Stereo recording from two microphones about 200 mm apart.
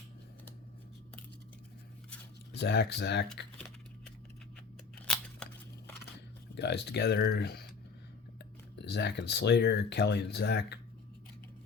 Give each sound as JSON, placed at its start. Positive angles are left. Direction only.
{"t": 2.5, "sound": "speech", "side_deg": 55}
{"t": 5.0, "sound": "scissors", "side_deg": 5}
{"t": 6.1, "sound": "speech", "side_deg": 60}
{"t": 8.7, "sound": "speech", "side_deg": 60}